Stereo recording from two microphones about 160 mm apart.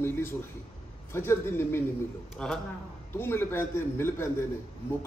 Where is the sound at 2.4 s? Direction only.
5° left (ahead or behind).